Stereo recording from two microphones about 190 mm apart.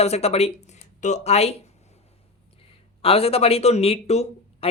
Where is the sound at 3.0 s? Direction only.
30° left (ahead or behind).